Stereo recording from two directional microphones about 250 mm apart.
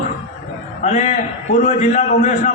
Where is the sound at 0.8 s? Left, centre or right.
Left.